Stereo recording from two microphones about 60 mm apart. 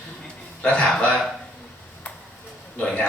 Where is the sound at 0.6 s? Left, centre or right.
Left.